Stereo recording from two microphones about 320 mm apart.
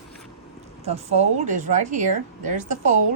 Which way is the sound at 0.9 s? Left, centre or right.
Centre.